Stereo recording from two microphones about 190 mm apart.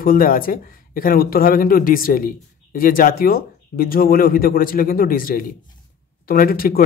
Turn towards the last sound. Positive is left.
turn(degrees=50)  # may be behind; listen again after turning